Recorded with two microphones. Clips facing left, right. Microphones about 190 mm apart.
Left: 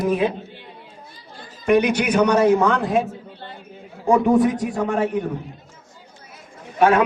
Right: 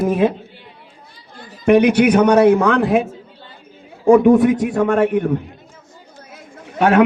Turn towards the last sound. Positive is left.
turn(degrees=-70)  # may be behind; listen again after turning